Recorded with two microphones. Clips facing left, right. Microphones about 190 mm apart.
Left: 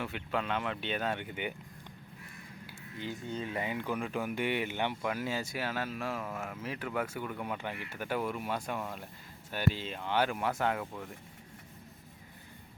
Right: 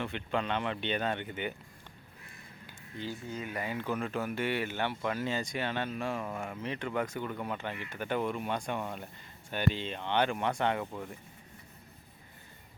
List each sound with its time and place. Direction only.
0.0 s speech: 5° left (ahead or behind)
2.6 s a sound: 15° left (ahead or behind)
3.3 s speech: 30° left (ahead or behind); by 11.1 s centre (ahead or behind)